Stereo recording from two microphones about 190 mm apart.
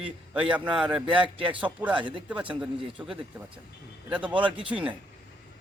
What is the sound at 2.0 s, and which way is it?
Speech, 25° right (ahead or behind).